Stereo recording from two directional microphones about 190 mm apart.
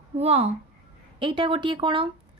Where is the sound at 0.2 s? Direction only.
30° right (ahead or behind).